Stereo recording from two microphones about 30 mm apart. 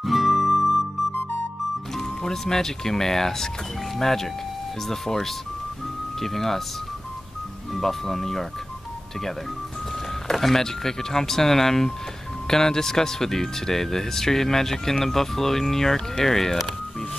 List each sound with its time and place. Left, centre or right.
0.0 s music: centre
2.2 s speech: centre
7.7 s speech: centre
10.3 s speech: centre
10.6 s speech: centre